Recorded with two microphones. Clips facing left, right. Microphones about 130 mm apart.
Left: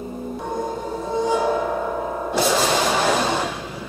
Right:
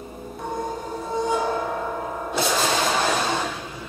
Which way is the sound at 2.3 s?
5° left (ahead or behind).